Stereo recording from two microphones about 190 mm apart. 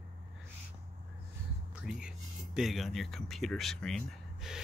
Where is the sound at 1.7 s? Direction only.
5° right (ahead or behind).